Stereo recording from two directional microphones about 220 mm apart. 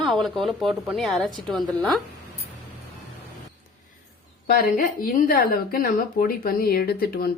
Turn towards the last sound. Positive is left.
turn(degrees=45)  # may be behind; listen again after turning